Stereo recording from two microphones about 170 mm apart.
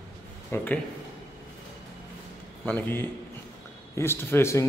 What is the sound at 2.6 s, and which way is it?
A man's voice, 10° left (ahead or behind).